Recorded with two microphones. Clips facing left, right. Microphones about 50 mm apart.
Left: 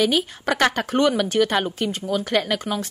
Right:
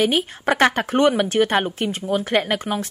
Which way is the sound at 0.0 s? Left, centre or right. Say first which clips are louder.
Right 1 dB; right.